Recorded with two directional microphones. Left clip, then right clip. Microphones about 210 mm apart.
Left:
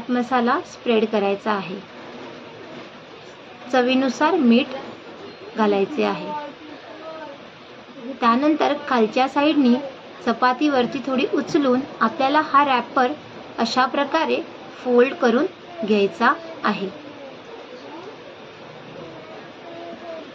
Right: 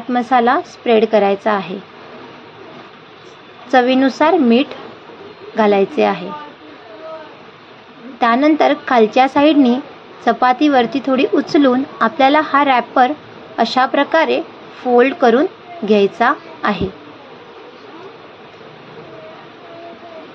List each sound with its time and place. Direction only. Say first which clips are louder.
0.1 s a woman's voice: right 7 dB; 30° right (ahead or behind)
3.7 s a woman's voice: right 7 dB; 25° right (ahead or behind)
8.2 s a woman's voice: right 6 dB; 30° right (ahead or behind)